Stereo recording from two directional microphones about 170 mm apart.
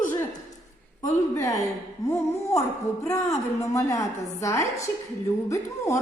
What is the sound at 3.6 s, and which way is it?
A woman's voice, 20° left (ahead or behind).